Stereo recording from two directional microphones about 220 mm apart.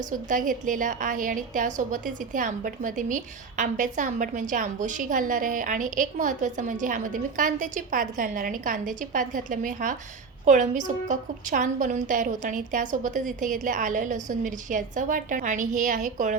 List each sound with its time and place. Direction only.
0.0 s a woman's voice: 35° right (ahead or behind)